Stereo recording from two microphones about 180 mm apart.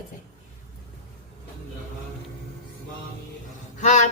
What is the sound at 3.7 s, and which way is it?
Speech, 40° left (ahead or behind).